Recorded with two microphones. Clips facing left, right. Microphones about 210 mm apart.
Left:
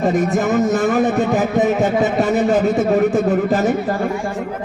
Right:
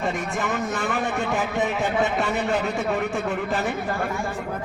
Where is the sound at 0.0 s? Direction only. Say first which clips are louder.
Left 10 dB; 40° left (ahead or behind).